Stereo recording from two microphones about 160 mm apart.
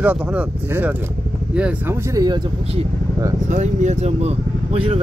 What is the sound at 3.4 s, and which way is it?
Speech, 50° right (ahead or behind).